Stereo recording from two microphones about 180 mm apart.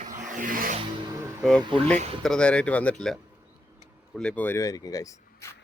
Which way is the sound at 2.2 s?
5° left (ahead or behind).